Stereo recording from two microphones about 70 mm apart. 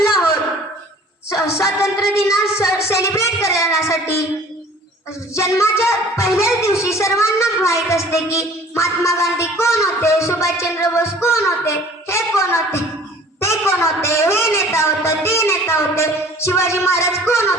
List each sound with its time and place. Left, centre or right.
1.3 s music: left
5.3 s a woman's voice: left